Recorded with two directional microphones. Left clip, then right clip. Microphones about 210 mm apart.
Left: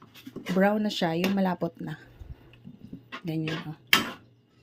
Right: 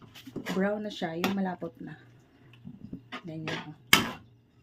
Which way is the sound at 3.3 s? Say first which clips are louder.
Left 13 dB; 40° left (ahead or behind).